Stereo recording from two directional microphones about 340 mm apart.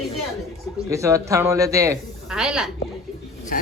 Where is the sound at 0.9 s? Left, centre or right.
Centre.